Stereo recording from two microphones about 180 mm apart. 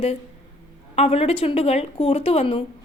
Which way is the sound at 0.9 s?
35° left (ahead or behind).